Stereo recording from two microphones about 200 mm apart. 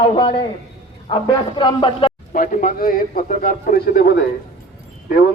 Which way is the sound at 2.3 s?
40° left (ahead or behind).